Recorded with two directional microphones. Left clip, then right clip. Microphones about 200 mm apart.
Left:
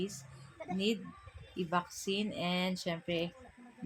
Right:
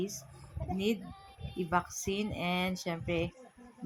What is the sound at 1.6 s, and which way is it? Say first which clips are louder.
Speech: right 3 dB; 5° right (ahead or behind).